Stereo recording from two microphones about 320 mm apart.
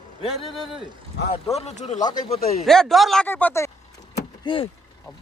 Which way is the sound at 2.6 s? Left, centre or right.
Centre.